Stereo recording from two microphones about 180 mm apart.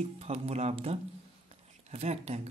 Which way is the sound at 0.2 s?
35° right (ahead or behind).